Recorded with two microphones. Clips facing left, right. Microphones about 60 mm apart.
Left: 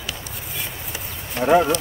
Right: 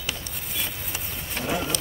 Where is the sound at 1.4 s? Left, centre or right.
Left.